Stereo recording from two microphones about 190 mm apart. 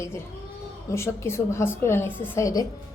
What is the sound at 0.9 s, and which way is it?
A woman's voice, 15° left (ahead or behind).